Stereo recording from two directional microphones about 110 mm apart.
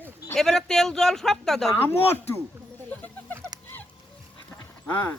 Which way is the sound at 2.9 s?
15° left (ahead or behind).